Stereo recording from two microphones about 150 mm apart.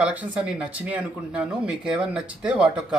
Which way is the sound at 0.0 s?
10° right (ahead or behind).